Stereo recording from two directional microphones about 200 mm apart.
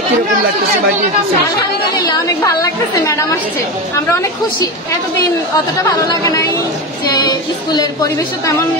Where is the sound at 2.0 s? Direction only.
15° left (ahead or behind).